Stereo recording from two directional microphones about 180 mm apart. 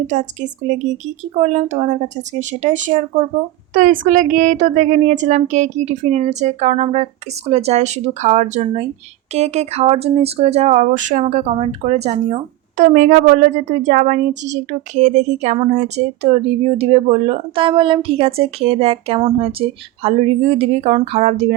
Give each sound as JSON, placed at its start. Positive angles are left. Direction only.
{"t": 0.1, "sound": "speech", "side_deg": -40}